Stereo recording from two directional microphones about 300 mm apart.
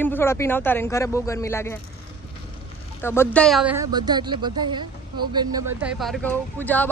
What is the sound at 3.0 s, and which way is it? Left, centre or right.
A woman's voice, centre.